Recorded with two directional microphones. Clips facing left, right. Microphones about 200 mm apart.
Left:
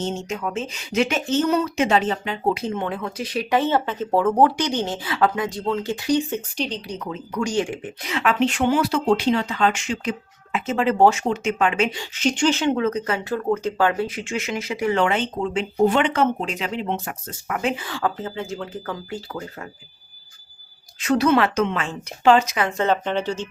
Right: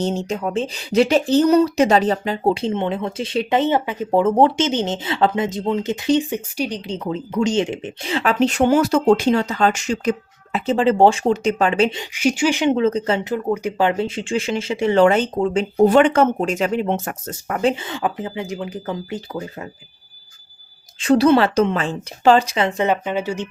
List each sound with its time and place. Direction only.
0.0 s speech: 35° right (ahead or behind); by 6.8 s 15° right (ahead or behind)
6.8 s speech: 30° right (ahead or behind)
11.9 s speech: 10° right (ahead or behind); by 15.0 s 25° right (ahead or behind)
15.0 s speech: 40° right (ahead or behind)
17.8 s speech: 20° right (ahead or behind)
21.0 s speech: 30° right (ahead or behind)
22.9 s speech: 10° right (ahead or behind)